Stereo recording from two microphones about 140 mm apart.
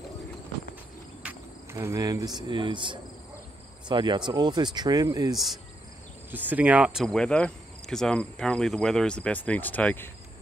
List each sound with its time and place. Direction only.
1.2 s speech: 15° right (ahead or behind)
6.3 s speech: 10° right (ahead or behind); by 10.1 s 15° left (ahead or behind)